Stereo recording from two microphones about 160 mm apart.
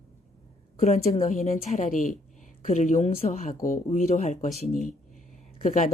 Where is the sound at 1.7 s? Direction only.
55° left (ahead or behind).